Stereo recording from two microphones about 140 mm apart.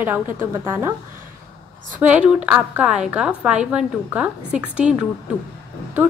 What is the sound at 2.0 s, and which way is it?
A woman's voice, 10° right (ahead or behind).